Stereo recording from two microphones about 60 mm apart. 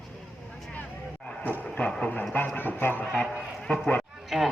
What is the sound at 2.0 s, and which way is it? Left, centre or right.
Vehicle, centre.